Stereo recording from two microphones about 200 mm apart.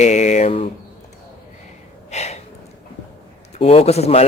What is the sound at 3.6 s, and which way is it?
Speech, 30° left (ahead or behind).